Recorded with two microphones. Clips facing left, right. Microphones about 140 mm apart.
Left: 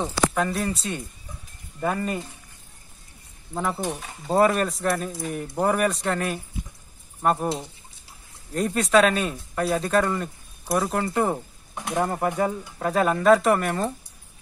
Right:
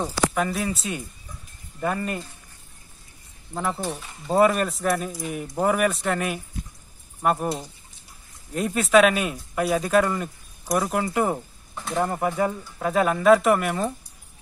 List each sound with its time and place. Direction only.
0.0 s speech: 5° right (ahead or behind)
3.5 s speech: 5° left (ahead or behind)
7.4 s speech: 25° left (ahead or behind)
8.5 s speech: 5° right (ahead or behind)
11.7 s speech: 20° left (ahead or behind)
12.0 s speech: centre (ahead or behind)